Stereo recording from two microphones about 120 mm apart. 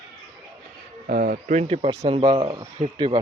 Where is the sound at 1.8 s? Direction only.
50° right (ahead or behind).